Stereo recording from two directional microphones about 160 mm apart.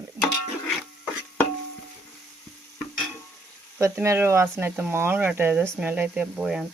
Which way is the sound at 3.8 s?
15° right (ahead or behind).